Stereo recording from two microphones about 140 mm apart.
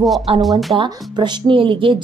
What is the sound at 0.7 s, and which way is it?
Speech, 35° right (ahead or behind).